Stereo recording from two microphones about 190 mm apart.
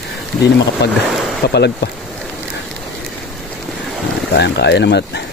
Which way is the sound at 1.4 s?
55° left (ahead or behind).